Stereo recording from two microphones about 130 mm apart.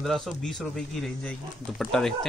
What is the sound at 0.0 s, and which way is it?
A man's voice, centre (ahead or behind).